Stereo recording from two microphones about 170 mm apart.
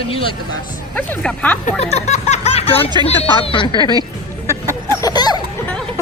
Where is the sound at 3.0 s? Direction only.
30° left (ahead or behind).